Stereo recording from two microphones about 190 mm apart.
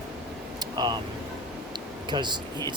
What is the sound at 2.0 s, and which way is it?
Speech, 25° right (ahead or behind).